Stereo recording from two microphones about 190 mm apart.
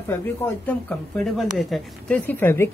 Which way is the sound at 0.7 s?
10° left (ahead or behind).